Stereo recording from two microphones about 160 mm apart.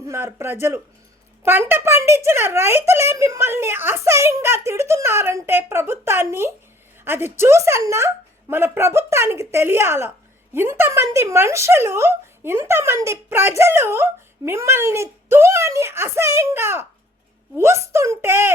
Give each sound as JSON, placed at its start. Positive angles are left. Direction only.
{"t": 0.1, "sound": "speech", "side_deg": -15}